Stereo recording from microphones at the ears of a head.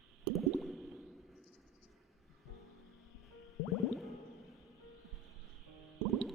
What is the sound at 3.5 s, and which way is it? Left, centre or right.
Music, left.